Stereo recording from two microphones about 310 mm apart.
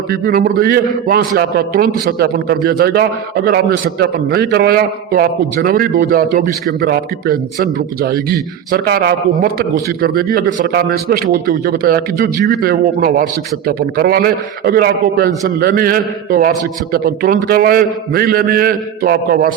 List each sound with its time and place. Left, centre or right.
0.1 s a man's voice: right